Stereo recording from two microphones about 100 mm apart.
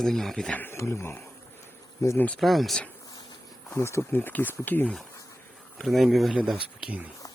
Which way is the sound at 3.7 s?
30° left (ahead or behind).